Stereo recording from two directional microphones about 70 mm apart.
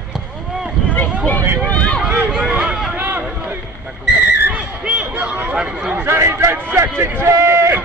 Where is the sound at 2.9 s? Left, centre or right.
Right.